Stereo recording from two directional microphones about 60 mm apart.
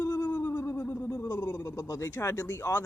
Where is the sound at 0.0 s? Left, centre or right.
Left.